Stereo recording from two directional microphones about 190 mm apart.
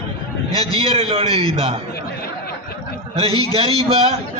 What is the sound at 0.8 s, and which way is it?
A man's voice, 30° right (ahead or behind).